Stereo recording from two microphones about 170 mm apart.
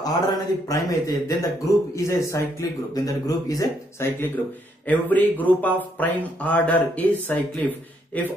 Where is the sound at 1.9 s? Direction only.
20° left (ahead or behind).